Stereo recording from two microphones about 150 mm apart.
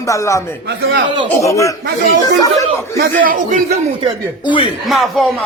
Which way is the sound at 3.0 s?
65° right (ahead or behind).